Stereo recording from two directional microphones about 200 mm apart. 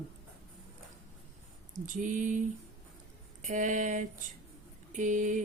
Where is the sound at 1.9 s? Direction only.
40° right (ahead or behind).